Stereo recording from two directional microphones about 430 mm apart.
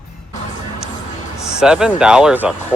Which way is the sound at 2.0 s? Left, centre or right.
Centre.